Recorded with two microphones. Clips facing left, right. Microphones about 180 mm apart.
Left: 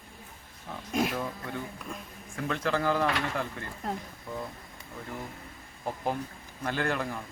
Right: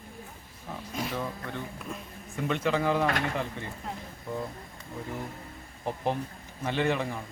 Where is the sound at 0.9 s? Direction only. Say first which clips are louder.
Left 7 dB; 90° left.